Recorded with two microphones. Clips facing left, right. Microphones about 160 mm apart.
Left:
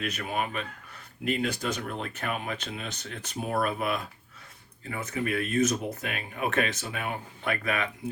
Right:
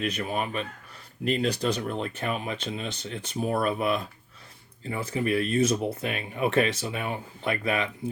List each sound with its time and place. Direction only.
0.0 s speech: 35° right (ahead or behind)